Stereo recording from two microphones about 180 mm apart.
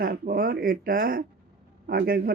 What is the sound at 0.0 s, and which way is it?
Speech, 55° right (ahead or behind).